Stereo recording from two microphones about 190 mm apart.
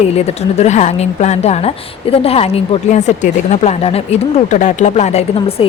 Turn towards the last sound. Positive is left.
turn(degrees=30)  # may be behind; listen again after turning